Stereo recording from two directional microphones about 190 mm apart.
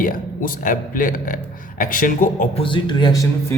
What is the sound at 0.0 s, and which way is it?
Speech, 45° left (ahead or behind).